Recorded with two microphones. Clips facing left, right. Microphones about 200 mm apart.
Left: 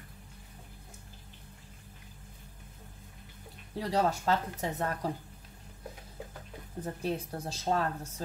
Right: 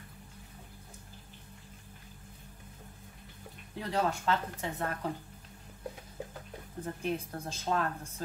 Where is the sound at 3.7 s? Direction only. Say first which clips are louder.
Left 3 dB; 35° left (ahead or behind).